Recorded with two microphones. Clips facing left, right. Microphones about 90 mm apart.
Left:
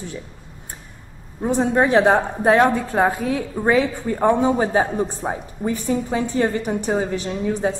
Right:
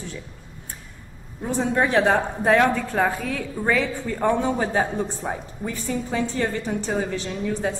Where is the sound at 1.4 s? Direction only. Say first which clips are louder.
Left 4 dB; 20° left (ahead or behind).